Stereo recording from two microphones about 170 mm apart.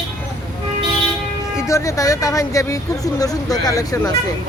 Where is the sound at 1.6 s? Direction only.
15° left (ahead or behind).